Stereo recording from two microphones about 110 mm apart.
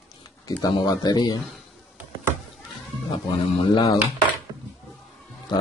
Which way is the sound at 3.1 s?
50° left (ahead or behind).